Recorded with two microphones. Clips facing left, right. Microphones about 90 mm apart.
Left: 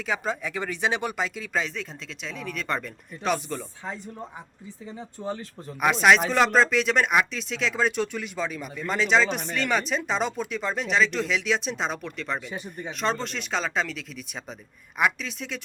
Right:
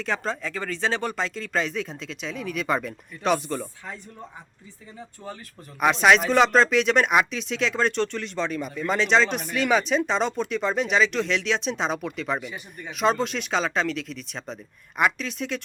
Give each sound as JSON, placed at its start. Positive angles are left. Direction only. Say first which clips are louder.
{"t": 0.0, "sound": "speech", "louder": "right 1 dB", "side_deg": 5}
{"t": 4.9, "sound": "speech", "louder": "left 5 dB", "side_deg": 20}
{"t": 5.8, "sound": "speech", "louder": "right 1 dB", "side_deg": 0}